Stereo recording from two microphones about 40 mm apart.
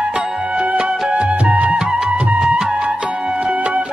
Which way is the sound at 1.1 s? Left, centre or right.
Right.